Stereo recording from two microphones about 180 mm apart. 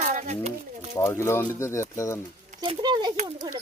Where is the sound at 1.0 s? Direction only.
15° left (ahead or behind).